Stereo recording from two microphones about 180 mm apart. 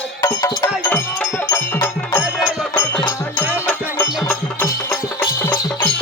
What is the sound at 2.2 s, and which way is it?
Music, 5° right (ahead or behind).